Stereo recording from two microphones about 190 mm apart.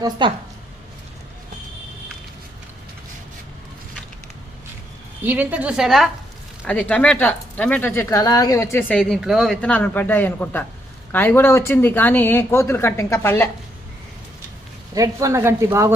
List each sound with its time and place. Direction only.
0.0 s a woman's voice: 25° right (ahead or behind)
5.2 s speech: 10° right (ahead or behind); by 13.5 s 15° left (ahead or behind)
14.9 s speech: 15° right (ahead or behind)